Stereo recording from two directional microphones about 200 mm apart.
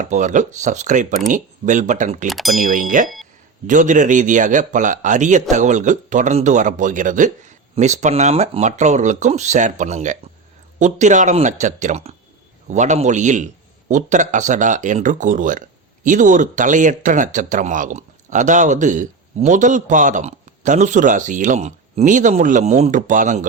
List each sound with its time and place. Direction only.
0.0 s speech: 40° right (ahead or behind)
2.2 s speech: centre (ahead or behind)
2.6 s speech: 40° right (ahead or behind)